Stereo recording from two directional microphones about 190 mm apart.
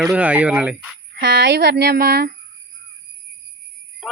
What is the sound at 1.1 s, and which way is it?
Speech, 55° right (ahead or behind).